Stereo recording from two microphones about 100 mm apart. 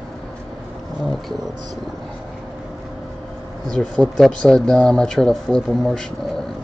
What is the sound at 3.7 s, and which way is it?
Speech, 5° left (ahead or behind).